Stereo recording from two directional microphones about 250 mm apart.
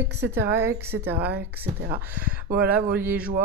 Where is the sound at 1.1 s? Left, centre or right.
Right.